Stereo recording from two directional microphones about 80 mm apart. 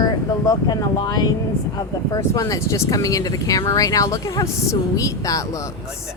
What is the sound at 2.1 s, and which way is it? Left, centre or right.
Speech, left.